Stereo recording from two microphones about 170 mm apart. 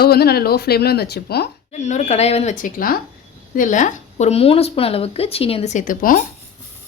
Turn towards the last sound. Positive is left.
turn(degrees=55)  # may be behind; listen again after turning